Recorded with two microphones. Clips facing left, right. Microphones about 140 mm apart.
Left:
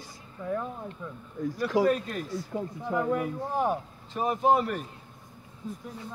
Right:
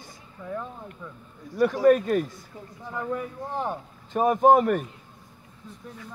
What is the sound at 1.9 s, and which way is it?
Speech, 50° right (ahead or behind).